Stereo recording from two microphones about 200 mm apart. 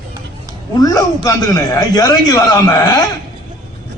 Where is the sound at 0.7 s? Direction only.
20° left (ahead or behind).